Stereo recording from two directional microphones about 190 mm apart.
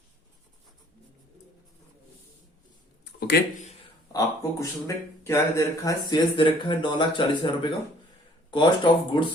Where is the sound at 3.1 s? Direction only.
60° left (ahead or behind).